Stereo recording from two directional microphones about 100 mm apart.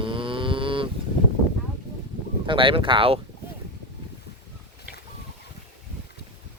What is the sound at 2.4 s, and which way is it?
Speech, 55° right (ahead or behind).